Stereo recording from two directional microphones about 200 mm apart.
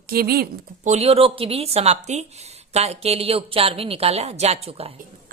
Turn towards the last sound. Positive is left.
turn(degrees=-30)  # may be behind; listen again after turning